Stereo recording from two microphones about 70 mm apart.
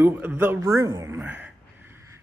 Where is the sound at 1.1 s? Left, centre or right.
Right.